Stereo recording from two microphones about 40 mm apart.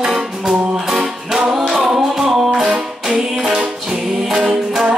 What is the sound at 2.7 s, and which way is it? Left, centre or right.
Music, right.